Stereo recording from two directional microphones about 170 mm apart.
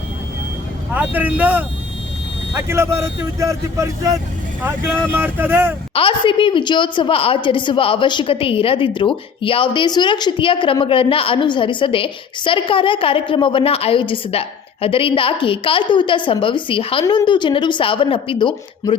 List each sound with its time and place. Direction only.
0.9 s speech: 10° right (ahead or behind)
5.1 s speech: 10° right (ahead or behind)
5.9 s a woman's voice: 30° left (ahead or behind)